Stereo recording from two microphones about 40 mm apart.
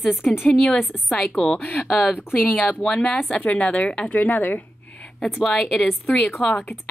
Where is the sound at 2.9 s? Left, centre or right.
Left.